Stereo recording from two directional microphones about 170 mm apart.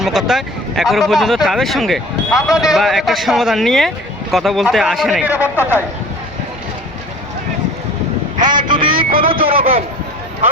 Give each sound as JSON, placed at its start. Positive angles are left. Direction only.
{"t": 0.0, "sound": "a man's voice", "side_deg": 0}
{"t": 8.5, "sound": "a sound", "side_deg": -25}
{"t": 9.2, "sound": "speech", "side_deg": -35}